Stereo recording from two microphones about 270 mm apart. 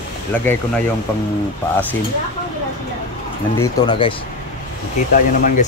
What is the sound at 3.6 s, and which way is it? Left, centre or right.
Speech, centre.